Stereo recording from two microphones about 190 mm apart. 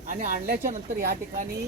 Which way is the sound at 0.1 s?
45° right (ahead or behind).